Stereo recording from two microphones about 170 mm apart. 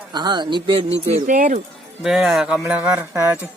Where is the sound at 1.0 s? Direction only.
50° right (ahead or behind).